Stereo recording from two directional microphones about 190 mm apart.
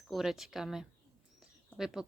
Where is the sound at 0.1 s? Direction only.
Centre (ahead or behind).